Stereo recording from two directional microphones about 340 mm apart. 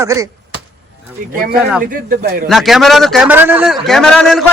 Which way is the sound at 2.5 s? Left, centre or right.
Centre.